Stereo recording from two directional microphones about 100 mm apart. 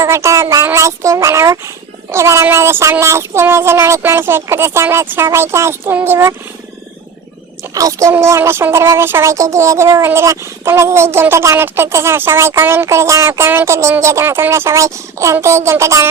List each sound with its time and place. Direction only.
0.0 s speech: 30° right (ahead or behind)
7.7 s speech: 35° right (ahead or behind)
8.1 s speech: 25° right (ahead or behind)